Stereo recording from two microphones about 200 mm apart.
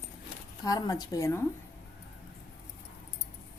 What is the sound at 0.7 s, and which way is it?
Speech, 20° left (ahead or behind).